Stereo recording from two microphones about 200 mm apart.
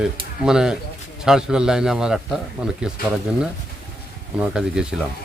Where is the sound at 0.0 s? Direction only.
5° right (ahead or behind).